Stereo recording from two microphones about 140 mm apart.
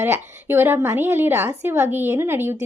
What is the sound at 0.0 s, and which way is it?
A woman's voice, 15° right (ahead or behind).